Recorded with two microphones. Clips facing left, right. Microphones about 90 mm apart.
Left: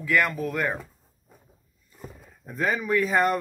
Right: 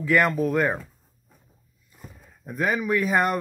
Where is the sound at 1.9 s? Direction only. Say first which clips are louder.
Left 4 dB; 10° right (ahead or behind).